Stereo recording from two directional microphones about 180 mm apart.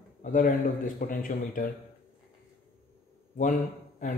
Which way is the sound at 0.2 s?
50° left (ahead or behind).